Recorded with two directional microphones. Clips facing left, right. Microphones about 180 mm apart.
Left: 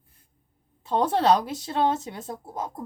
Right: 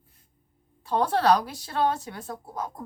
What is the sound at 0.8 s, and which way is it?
Speech, 20° left (ahead or behind).